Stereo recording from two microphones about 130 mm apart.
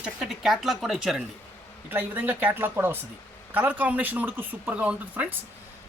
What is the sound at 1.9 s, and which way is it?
Speech, 15° right (ahead or behind).